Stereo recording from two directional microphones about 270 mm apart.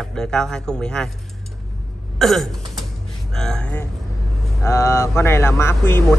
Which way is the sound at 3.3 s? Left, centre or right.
Centre.